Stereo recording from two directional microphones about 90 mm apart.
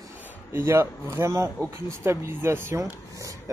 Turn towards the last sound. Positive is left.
turn(degrees=-35)  # may be behind; listen again after turning